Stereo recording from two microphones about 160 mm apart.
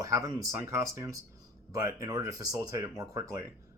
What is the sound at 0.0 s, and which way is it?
Speech, 20° right (ahead or behind).